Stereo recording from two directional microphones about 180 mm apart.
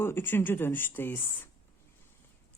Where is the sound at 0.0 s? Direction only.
10° left (ahead or behind).